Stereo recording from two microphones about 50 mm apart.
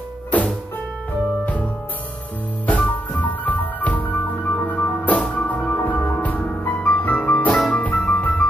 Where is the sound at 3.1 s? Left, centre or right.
Left.